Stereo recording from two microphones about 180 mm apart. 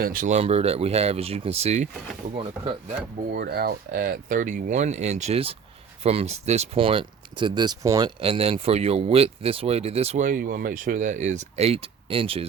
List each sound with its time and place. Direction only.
0.0 s speech: 50° right (ahead or behind)
2.3 s speech: 25° right (ahead or behind)
3.3 s speech: 60° right (ahead or behind); by 12.5 s 30° right (ahead or behind)